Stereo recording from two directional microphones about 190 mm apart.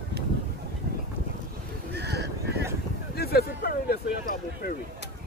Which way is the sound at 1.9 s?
60° right (ahead or behind).